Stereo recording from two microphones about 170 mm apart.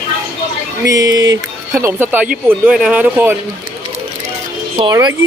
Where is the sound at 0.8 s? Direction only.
20° right (ahead or behind).